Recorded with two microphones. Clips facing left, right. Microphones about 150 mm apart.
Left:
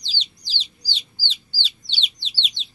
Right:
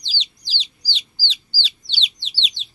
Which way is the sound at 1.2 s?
90° right.